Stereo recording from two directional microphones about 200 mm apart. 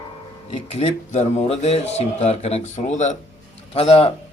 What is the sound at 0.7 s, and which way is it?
A man's voice, 35° left (ahead or behind).